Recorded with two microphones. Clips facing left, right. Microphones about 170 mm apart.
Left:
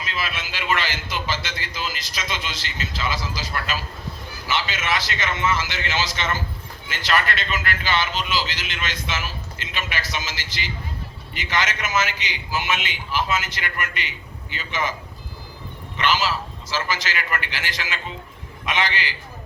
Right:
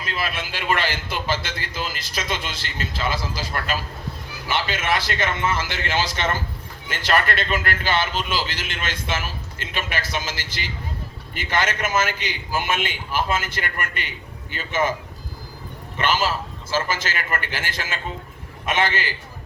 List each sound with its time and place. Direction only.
0.0 s a man's voice: 50° right (ahead or behind)
16.0 s a man's voice: 50° right (ahead or behind)